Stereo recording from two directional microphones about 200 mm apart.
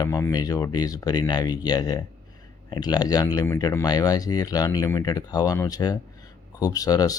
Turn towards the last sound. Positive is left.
turn(degrees=20)  # may be behind; listen again after turning